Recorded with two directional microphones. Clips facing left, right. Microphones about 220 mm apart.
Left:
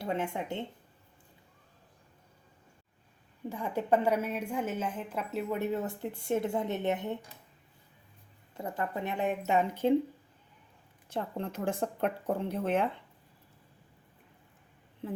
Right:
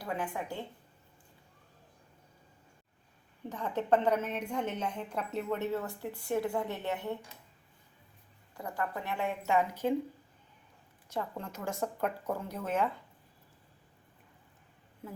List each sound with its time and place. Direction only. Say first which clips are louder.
0.0 s a woman's voice: left 3 dB; 25° left (ahead or behind)
3.5 s a woman's voice: even; 10° left (ahead or behind)
8.5 s a woman's voice: left 2 dB; 25° left (ahead or behind)
11.1 s a woman's voice: left 3 dB; 30° left (ahead or behind)